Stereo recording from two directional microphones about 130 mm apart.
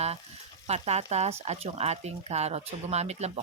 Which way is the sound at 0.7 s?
55° right (ahead or behind).